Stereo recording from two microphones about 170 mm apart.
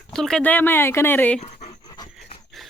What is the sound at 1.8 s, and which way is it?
Dog, 25° left (ahead or behind).